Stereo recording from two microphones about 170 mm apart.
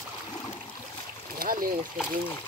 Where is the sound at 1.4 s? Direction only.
55° right (ahead or behind).